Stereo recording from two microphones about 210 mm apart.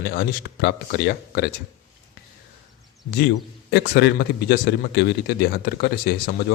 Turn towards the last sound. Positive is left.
turn(degrees=50)  # may be behind; listen again after turning